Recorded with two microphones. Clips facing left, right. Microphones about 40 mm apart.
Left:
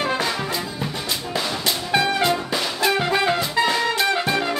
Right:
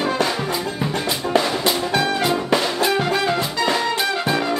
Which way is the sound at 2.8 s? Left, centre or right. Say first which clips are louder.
Even; centre.